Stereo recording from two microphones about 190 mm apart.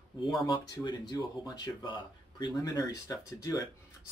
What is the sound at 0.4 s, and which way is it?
Speech, 20° left (ahead or behind).